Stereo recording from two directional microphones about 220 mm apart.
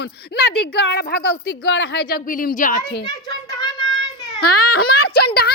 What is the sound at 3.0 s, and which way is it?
Speech, 15° left (ahead or behind).